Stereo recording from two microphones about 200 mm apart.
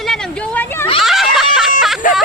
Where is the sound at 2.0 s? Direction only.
40° left (ahead or behind).